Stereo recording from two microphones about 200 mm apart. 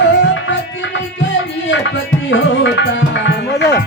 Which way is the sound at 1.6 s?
70° left (ahead or behind).